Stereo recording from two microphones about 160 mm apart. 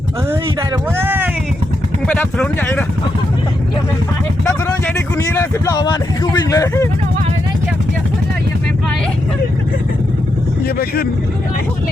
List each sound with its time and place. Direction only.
0.9 s a sound: 15° right (ahead or behind)
2.0 s speech: 10° left (ahead or behind)
4.9 s speech: 15° left (ahead or behind)
10.8 s speech: 75° left (ahead or behind)